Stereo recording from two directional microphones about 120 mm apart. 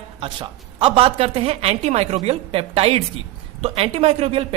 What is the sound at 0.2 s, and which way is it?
A woman's voice, 50° right (ahead or behind).